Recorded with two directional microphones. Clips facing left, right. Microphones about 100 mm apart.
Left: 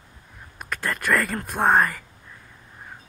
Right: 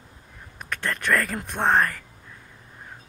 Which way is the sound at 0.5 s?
5° left (ahead or behind).